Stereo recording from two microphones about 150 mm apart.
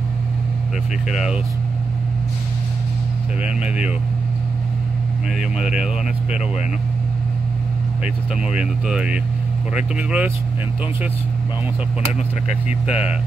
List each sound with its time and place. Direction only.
1.0 s speech: 5° right (ahead or behind)
3.4 s speech: 5° right (ahead or behind)
5.4 s speech: 5° right (ahead or behind)
8.5 s speech: 5° right (ahead or behind)
12.8 s speech: 10° right (ahead or behind)